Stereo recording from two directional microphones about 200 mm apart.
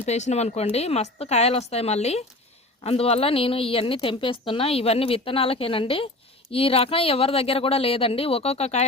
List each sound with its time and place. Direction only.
0.0 s a woman's voice: 35° left (ahead or behind)